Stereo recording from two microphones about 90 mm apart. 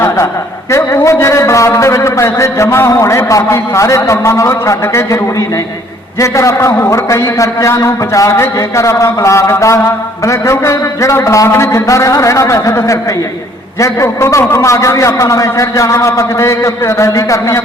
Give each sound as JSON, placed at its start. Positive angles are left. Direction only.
{"t": 0.7, "sound": "a man's voice", "side_deg": 30}